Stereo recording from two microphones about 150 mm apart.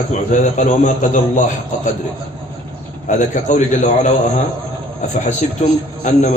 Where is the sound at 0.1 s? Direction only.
55° left (ahead or behind).